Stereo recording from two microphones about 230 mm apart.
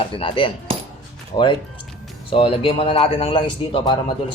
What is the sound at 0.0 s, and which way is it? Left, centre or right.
Speech, left.